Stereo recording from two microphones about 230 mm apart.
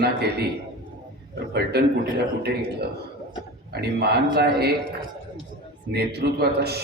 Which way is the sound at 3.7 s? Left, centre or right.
Right.